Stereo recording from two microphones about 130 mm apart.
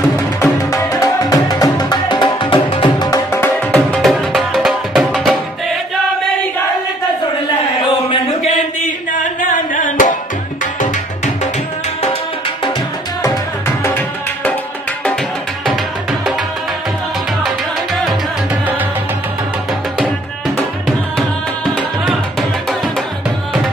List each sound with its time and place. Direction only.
0.1 s music: 25° left (ahead or behind); by 3.1 s 40° left (ahead or behind)
3.1 s music: 20° left (ahead or behind)
4.0 s music: centre (ahead or behind)
9.4 s singing: 90° left
13.2 s tabla: 20° left (ahead or behind)
18.5 s music: 15° right (ahead or behind)